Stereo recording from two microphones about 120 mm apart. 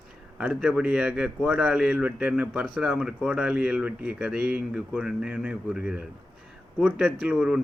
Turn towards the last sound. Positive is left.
turn(degrees=-10)  # may be behind; listen again after turning